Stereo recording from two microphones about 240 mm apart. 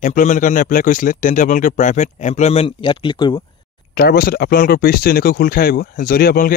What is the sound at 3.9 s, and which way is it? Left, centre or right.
Speech, left.